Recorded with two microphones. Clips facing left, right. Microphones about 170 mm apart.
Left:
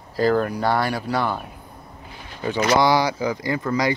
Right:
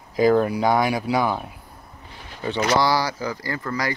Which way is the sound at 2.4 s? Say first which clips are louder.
Left 2 dB; 15° left (ahead or behind).